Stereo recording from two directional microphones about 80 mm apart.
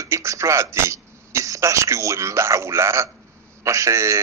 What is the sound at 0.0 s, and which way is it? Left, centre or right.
A man's voice, right.